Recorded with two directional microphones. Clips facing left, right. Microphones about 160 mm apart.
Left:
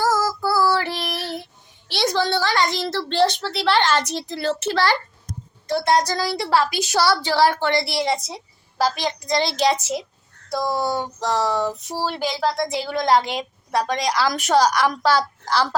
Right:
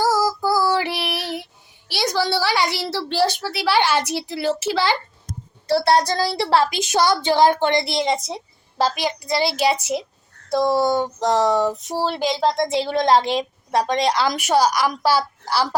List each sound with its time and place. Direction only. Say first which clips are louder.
0.0 s female singing: right 2 dB; 10° right (ahead or behind)
1.9 s a woman's voice: even; 5° right (ahead or behind)
5.6 s speech: right 2 dB; 35° right (ahead or behind)
9.0 s a woman's voice: right 1 dB; 10° right (ahead or behind)
10.5 s speech: right 5 dB; 25° right (ahead or behind)
14.3 s a woman's voice: even; 10° right (ahead or behind)